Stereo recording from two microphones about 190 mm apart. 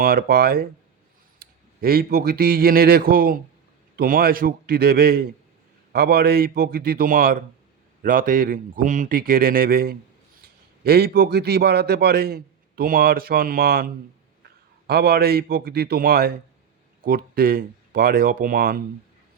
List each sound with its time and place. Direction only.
0.0 s a man's voice: 50° right (ahead or behind)